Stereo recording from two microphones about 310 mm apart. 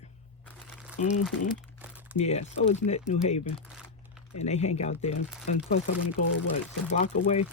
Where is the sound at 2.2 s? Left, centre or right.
Left.